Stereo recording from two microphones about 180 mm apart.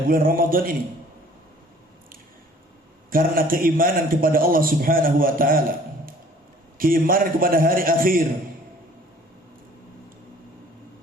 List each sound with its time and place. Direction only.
0.1 s a man's voice: 50° right (ahead or behind)
3.1 s a man's voice: 50° right (ahead or behind)
6.7 s a man's voice: 50° right (ahead or behind)